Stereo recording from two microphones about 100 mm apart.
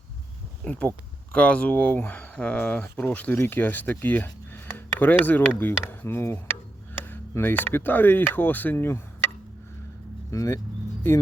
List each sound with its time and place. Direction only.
0.6 s speech: 10° left (ahead or behind)
10.3 s speech: 35° left (ahead or behind)